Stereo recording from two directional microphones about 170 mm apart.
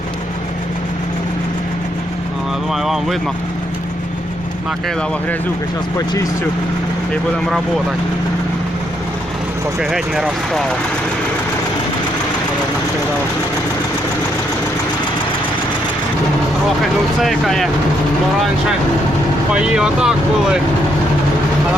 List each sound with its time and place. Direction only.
2.7 s speech: centre (ahead or behind)
9.9 s speech: centre (ahead or behind)
17.2 s speech: centre (ahead or behind)
19.5 s speech: 5° right (ahead or behind)